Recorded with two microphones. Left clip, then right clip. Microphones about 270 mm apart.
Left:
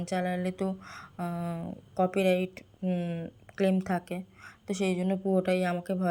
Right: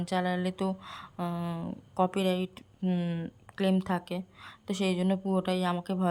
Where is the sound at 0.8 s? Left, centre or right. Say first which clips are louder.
Right 1 dB; right.